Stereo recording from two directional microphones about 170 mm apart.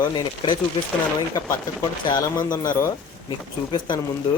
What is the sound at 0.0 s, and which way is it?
Speech, 30° left (ahead or behind).